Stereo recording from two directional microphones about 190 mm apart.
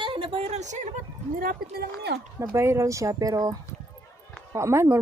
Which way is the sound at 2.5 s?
15° right (ahead or behind).